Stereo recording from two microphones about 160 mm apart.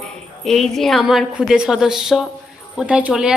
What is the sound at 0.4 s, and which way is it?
A woman's voice, centre (ahead or behind).